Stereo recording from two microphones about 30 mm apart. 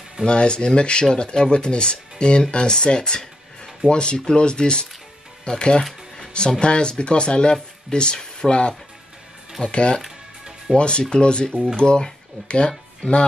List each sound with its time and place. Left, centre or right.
0.3 s speech: left